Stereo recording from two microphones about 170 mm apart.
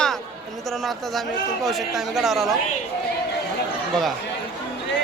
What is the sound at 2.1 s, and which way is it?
Speech, centre (ahead or behind).